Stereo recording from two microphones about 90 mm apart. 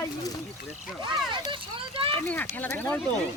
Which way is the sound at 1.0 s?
60° right (ahead or behind).